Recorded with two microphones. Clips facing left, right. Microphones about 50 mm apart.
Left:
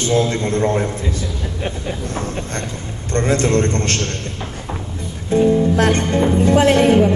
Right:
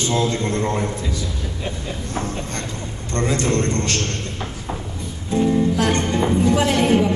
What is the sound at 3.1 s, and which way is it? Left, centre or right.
Music, left.